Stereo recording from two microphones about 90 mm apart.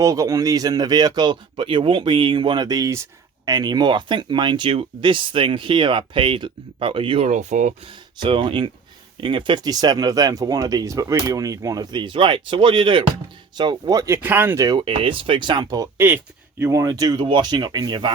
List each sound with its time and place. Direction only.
0.0 s speech: 35° right (ahead or behind); by 9.6 s 60° right (ahead or behind)
9.6 s speech: 45° right (ahead or behind); by 13.1 s 70° right (ahead or behind)
13.6 s speech: 50° right (ahead or behind)
14.2 s speech: 20° right (ahead or behind)
14.8 s speech: 80° right; by 15.9 s 45° right (ahead or behind)
16.0 s speech: 25° right (ahead or behind)
16.8 s speech: 45° right (ahead or behind)
17.2 s speech: 65° right (ahead or behind)